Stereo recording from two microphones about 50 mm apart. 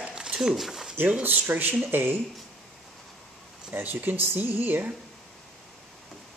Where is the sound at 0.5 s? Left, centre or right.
Centre.